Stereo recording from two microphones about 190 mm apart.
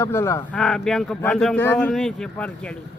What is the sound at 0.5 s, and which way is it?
Speech, centre (ahead or behind).